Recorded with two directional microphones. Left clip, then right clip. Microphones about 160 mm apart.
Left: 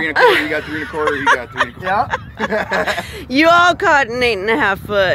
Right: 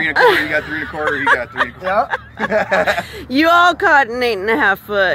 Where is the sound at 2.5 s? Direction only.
40° right (ahead or behind).